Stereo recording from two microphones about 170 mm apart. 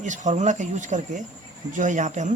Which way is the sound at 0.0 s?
45° right (ahead or behind).